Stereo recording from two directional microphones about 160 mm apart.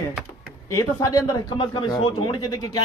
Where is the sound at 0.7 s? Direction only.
20° left (ahead or behind).